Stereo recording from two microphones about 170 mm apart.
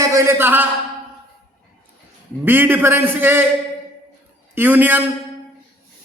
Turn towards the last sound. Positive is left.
turn(degrees=-10)  # may be behind; listen again after turning